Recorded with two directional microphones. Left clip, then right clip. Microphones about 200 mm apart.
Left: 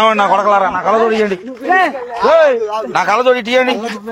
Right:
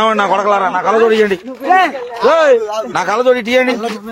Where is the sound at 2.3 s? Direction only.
20° left (ahead or behind).